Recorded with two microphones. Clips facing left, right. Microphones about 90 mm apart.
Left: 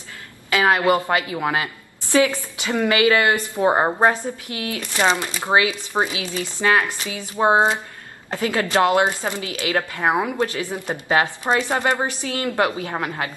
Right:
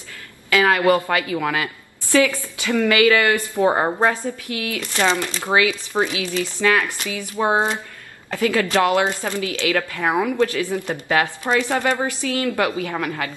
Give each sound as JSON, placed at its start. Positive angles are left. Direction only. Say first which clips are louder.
{"t": 0.5, "sound": "a woman's voice", "louder": "right 1 dB", "side_deg": 25}